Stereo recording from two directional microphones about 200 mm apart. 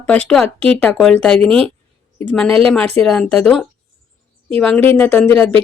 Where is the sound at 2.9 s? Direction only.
5° left (ahead or behind).